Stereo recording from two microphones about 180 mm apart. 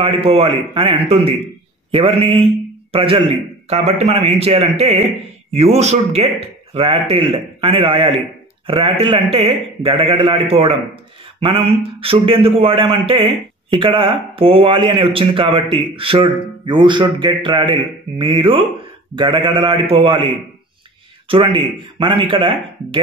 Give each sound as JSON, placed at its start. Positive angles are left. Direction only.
{"t": 0.0, "sound": "a man's voice", "side_deg": -30}